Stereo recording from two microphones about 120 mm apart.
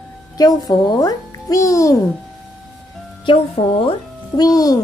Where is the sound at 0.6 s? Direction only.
35° left (ahead or behind).